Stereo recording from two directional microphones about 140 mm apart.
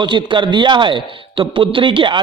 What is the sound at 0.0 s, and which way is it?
A man's voice, 35° right (ahead or behind).